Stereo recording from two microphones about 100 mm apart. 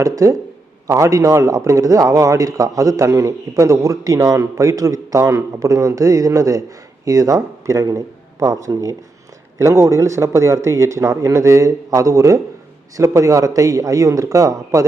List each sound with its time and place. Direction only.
0.0 s a man's voice: 30° right (ahead or behind)